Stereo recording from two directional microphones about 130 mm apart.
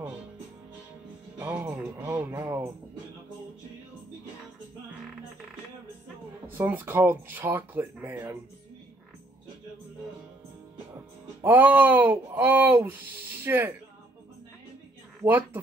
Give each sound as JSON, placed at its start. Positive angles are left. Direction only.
{"t": 1.4, "sound": "music", "side_deg": -15}
{"t": 2.1, "sound": "speech", "side_deg": -15}
{"t": 2.4, "sound": "speech", "side_deg": -25}
{"t": 6.5, "sound": "speech", "side_deg": -15}
{"t": 11.4, "sound": "speech", "side_deg": -15}
{"t": 15.2, "sound": "speech", "side_deg": -15}